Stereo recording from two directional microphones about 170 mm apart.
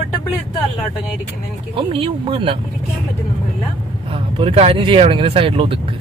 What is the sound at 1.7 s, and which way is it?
Speech, 35° right (ahead or behind).